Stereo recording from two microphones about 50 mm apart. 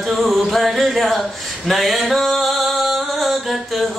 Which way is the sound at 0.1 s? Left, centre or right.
Centre.